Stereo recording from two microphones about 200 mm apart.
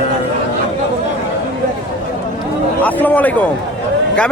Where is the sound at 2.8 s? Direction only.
10° left (ahead or behind).